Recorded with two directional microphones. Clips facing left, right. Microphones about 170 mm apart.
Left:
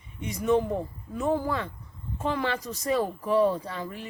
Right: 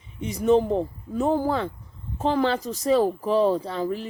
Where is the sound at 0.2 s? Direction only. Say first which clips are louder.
Right 5 dB; 30° right (ahead or behind).